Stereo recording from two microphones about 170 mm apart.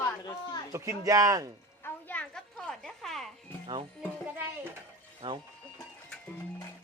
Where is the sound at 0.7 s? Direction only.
15° right (ahead or behind).